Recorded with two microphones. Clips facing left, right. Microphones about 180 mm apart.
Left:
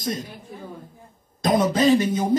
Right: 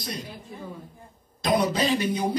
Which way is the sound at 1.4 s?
45° left (ahead or behind).